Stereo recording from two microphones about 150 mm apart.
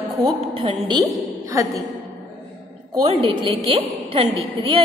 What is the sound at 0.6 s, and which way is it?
Speech, 40° right (ahead or behind).